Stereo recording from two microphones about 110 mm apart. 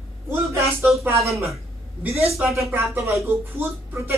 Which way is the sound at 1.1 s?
25° right (ahead or behind).